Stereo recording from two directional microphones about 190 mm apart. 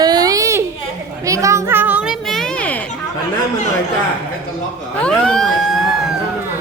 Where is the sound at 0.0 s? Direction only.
20° right (ahead or behind).